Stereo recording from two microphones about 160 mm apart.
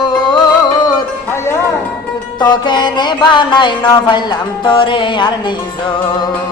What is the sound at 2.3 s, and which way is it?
Music, 25° left (ahead or behind).